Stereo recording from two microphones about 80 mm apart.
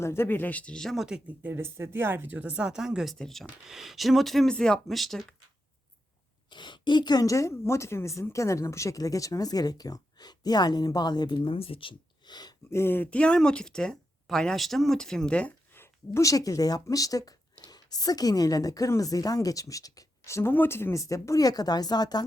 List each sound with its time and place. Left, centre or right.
0.0 s speech: left; by 0.9 s centre
0.9 s speech: centre
1.4 s speech: right; by 5.3 s centre
6.5 s a sound: left
7.3 s speech: left
12.7 s speech: left
15.7 s a sound: left
16.2 s speech: left
21.0 s a woman's voice: left